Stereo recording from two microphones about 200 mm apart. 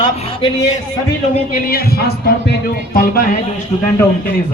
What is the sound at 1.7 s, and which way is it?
Speech, 50° left (ahead or behind).